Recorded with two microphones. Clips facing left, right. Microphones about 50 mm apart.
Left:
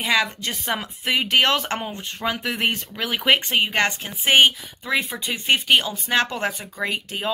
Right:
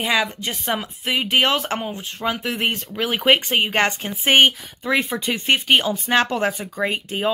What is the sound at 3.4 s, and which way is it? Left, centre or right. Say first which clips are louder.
Speech: right 1 dB; right.